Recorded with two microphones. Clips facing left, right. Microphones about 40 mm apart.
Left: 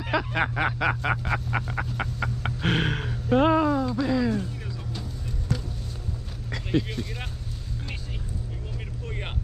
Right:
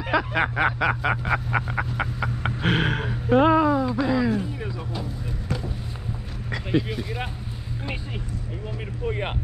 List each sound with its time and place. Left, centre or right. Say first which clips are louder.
0.0 s snicker: right 3 dB; centre
6.5 s speech: right 2 dB; centre
9.0 s a sound: right 10 dB; centre